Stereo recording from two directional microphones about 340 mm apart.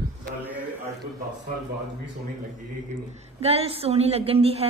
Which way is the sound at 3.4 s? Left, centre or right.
Centre.